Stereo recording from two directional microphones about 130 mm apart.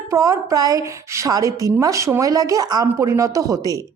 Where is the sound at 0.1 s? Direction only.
25° right (ahead or behind).